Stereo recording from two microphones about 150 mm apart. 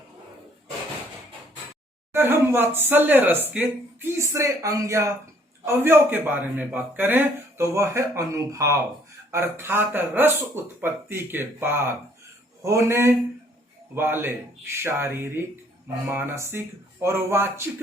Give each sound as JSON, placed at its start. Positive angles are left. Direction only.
{"t": 2.1, "sound": "a man's voice", "side_deg": -15}